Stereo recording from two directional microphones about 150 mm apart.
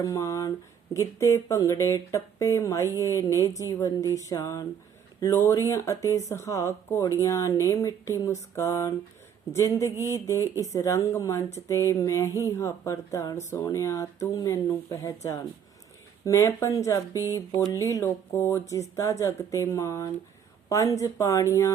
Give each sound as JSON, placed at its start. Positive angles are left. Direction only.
{"t": 0.0, "sound": "speech", "side_deg": 20}
{"t": 9.9, "sound": "speech", "side_deg": -20}
{"t": 10.2, "sound": "speech", "side_deg": 20}
{"t": 17.2, "sound": "speech", "side_deg": -20}
{"t": 17.5, "sound": "speech", "side_deg": 25}